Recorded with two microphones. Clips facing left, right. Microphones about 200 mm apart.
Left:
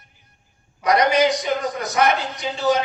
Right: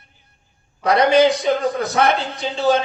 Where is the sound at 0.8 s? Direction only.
30° right (ahead or behind).